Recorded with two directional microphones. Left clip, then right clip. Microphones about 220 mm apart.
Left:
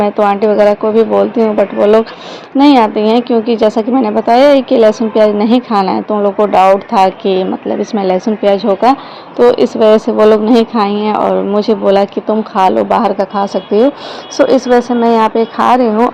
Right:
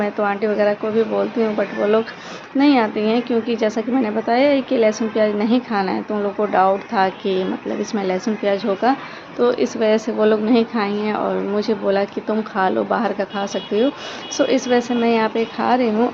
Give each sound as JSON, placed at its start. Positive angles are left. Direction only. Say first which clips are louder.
{"t": 0.0, "sound": "speech", "louder": "left 10 dB", "side_deg": 30}